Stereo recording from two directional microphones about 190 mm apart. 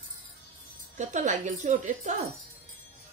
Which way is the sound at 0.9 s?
40° right (ahead or behind).